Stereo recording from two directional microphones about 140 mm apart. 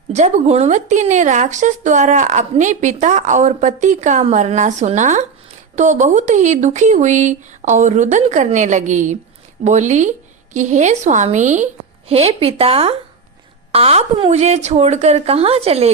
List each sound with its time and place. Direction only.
0.1 s speech: 55° right (ahead or behind)